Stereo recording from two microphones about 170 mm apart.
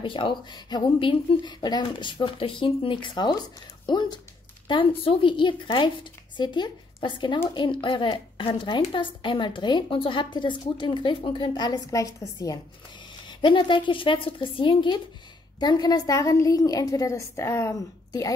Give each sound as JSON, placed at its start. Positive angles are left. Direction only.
{"t": 0.0, "sound": "a woman's voice", "side_deg": 30}